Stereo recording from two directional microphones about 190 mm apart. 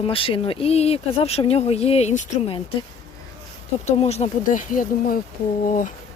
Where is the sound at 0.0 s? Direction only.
30° left (ahead or behind).